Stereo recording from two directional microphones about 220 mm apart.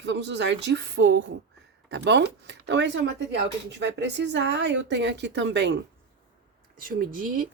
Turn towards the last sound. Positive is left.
turn(degrees=-40)  # may be behind; listen again after turning